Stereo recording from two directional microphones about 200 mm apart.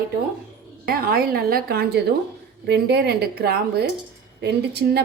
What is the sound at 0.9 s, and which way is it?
A woman's voice, 50° right (ahead or behind).